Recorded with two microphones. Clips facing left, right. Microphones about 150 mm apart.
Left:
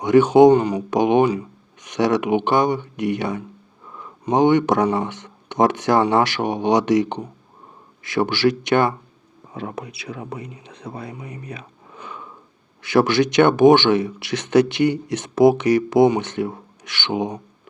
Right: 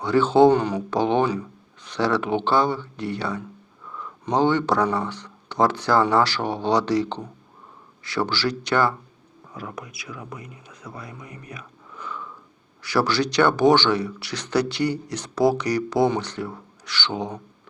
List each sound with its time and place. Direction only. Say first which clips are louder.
0.0 s speech: left 4 dB; 15° left (ahead or behind)
12.8 s speech: left 5 dB; 20° left (ahead or behind)